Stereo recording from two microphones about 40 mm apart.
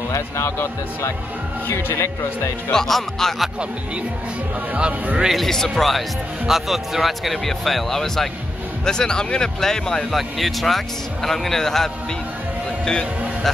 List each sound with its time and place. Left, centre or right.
1.7 s speech: left
2.7 s speech: centre
5.5 s speech: centre
6.4 s speech: centre
10.1 s speech: centre